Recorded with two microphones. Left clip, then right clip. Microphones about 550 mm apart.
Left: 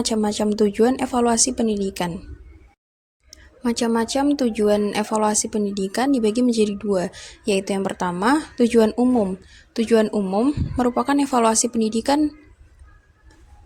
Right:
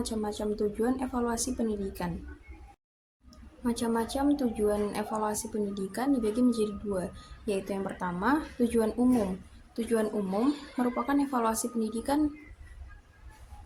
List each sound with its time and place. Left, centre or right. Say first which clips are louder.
0.0 s speech: left 11 dB; centre
3.6 s speech: left 9 dB; centre